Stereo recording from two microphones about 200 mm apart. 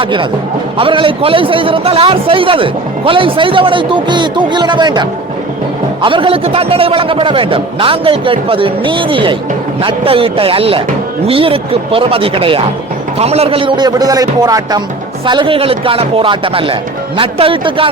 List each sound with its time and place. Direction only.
0.0 s a man's voice: 25° right (ahead or behind)